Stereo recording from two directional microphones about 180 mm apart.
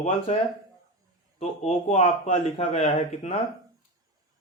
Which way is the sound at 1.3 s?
40° left (ahead or behind).